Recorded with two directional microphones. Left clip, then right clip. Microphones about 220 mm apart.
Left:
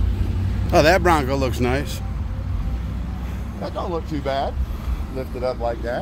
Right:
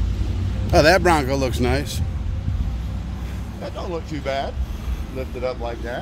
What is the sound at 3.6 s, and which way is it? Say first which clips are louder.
Speech: left 3 dB; 55° left (ahead or behind).